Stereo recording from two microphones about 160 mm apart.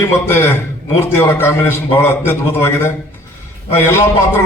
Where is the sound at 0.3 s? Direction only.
15° left (ahead or behind).